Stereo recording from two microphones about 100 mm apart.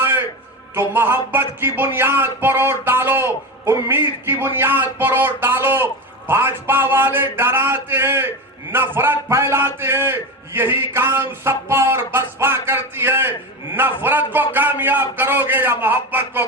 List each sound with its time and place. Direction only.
0.7 s a man's voice: 25° right (ahead or behind)